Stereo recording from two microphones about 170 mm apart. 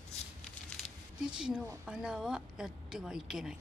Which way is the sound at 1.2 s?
5° right (ahead or behind).